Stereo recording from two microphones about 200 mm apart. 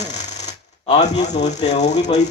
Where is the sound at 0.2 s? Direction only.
35° left (ahead or behind).